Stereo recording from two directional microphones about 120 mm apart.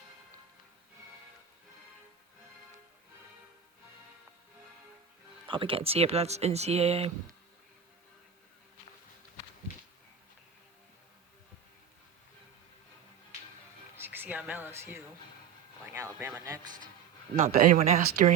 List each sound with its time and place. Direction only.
5.5 s speech: 50° right (ahead or behind)
13.9 s a sound: 20° right (ahead or behind)
16.1 s speech: 15° right (ahead or behind)
16.4 s speech: 30° right (ahead or behind)
17.4 s speech: 70° right (ahead or behind)